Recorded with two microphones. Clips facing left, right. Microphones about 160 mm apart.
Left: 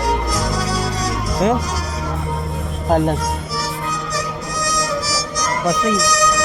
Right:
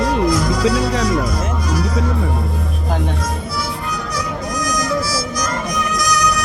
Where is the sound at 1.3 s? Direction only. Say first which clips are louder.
Left 4 dB; 90° left.